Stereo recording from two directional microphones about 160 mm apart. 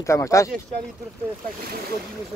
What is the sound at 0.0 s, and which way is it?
Speech, 20° left (ahead or behind).